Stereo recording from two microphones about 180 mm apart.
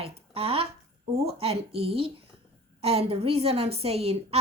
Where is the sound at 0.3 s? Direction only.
30° right (ahead or behind).